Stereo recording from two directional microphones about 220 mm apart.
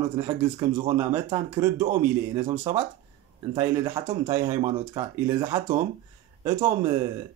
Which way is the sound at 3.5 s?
10° right (ahead or behind).